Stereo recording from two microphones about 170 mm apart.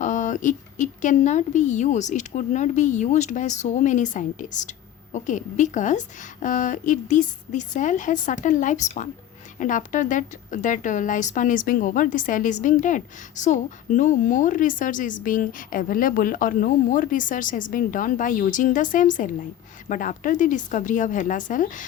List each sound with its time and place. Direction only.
0.0 s a woman's voice: 50° left (ahead or behind)